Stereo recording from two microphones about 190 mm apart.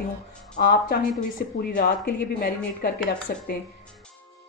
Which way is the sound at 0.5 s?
45° left (ahead or behind).